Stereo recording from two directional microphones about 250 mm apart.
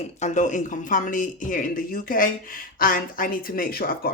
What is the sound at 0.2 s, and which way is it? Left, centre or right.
Speech, left.